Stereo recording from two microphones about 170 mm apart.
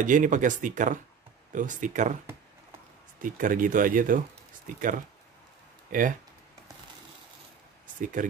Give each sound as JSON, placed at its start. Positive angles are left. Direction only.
{"t": 0.0, "sound": "speech", "side_deg": -50}
{"t": 3.2, "sound": "speech", "side_deg": -55}
{"t": 5.9, "sound": "speech", "side_deg": -55}
{"t": 7.8, "sound": "a sound", "side_deg": -50}